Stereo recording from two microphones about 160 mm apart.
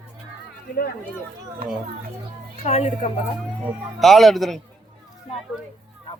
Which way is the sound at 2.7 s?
40° left (ahead or behind).